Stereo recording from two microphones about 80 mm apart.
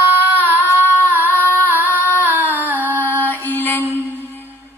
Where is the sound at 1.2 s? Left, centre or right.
Left.